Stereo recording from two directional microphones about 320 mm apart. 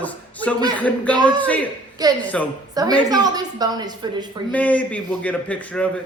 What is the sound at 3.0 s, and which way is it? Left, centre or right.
Speech, centre.